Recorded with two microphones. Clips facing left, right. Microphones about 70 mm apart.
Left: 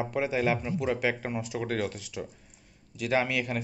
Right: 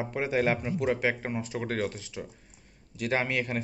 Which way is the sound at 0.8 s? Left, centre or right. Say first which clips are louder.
Right 1 dB; right.